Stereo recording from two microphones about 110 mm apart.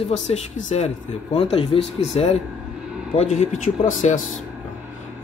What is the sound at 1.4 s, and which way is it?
Speech, 60° left (ahead or behind).